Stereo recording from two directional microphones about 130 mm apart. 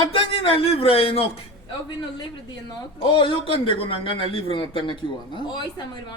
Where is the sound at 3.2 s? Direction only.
40° left (ahead or behind).